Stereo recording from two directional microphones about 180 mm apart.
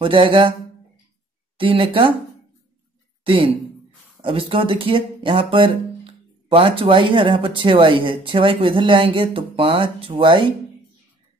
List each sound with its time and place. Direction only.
0.0 s speech: 30° right (ahead or behind)
1.6 s speech: 30° right (ahead or behind)
3.3 s speech: 30° right (ahead or behind)